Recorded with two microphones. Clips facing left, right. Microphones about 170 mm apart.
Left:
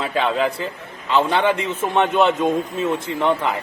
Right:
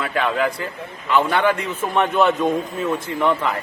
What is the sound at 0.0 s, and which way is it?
Speech, 25° left (ahead or behind).